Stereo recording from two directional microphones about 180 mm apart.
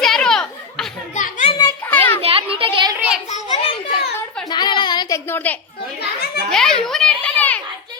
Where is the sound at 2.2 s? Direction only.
30° right (ahead or behind).